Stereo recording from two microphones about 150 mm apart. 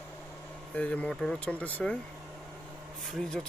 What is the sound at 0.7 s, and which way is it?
Speech, 10° left (ahead or behind).